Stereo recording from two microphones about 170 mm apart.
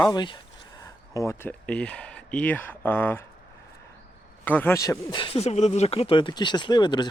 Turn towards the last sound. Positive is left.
turn(degrees=25)  # may be behind; listen again after turning